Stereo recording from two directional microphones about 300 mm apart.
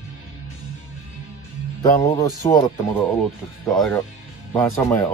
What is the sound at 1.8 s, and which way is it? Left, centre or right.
Speech, centre.